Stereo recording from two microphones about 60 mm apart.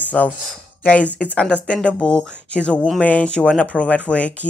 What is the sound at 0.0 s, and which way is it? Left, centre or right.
Speech, left.